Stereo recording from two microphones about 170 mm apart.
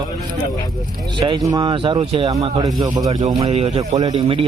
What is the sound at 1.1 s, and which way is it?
Speech, 30° right (ahead or behind).